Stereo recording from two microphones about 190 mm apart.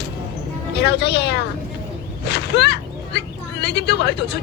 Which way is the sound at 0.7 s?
60° left (ahead or behind).